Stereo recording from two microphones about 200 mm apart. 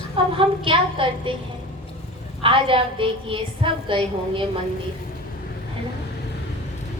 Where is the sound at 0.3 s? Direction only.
25° right (ahead or behind).